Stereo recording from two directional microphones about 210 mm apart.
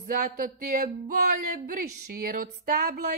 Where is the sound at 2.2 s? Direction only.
40° right (ahead or behind).